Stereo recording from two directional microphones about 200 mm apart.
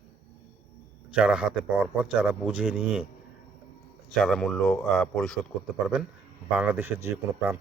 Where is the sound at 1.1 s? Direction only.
5° right (ahead or behind).